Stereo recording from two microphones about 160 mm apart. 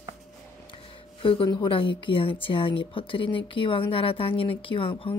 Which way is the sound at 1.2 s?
30° left (ahead or behind).